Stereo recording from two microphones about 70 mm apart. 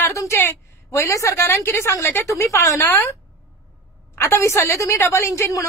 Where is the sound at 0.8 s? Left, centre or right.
Left.